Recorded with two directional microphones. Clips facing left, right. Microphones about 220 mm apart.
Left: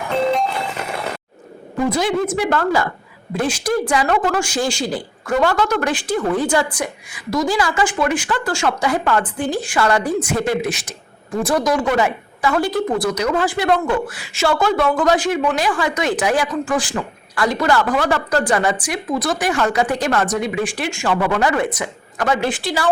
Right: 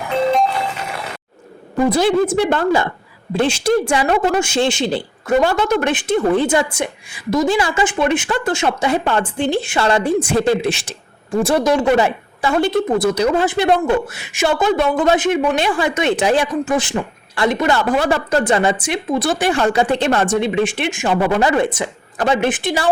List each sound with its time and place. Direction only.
1.9 s a woman's voice: 30° right (ahead or behind)